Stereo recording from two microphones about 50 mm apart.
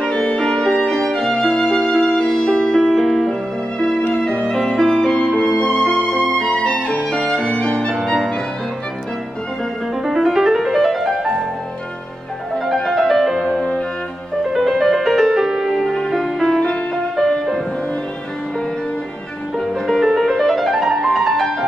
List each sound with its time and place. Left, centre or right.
0.0 s music: left; by 3.3 s centre
4.0 s music: left
4.6 s music: centre; by 7.9 s left
10.0 s music: centre
12.6 s music: centre
14.4 s music: centre
20.1 s music: centre